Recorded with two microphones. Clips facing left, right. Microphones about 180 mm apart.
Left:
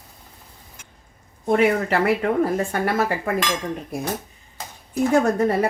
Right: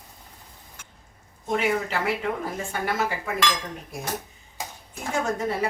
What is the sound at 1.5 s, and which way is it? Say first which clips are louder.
A woman's voice: left 7 dB; 60° left (ahead or behind).